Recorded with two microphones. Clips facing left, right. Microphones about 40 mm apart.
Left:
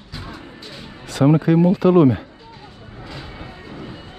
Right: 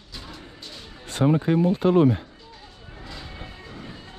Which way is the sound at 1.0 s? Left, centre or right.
Left.